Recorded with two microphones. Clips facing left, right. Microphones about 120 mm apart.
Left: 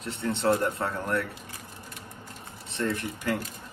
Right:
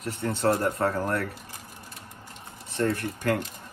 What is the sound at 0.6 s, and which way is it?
Speech, 30° right (ahead or behind).